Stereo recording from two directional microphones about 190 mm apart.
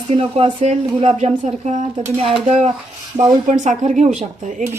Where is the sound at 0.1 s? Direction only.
30° right (ahead or behind).